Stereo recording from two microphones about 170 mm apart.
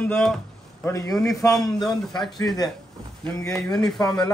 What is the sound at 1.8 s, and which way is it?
Speech, centre (ahead or behind).